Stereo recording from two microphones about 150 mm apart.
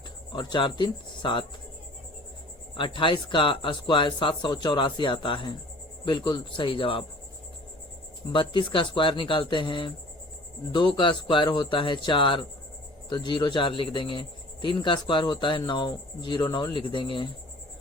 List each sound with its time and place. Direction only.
0.3 s speech: 30° left (ahead or behind)
2.7 s speech: 35° left (ahead or behind)
8.3 s speech: 35° left (ahead or behind)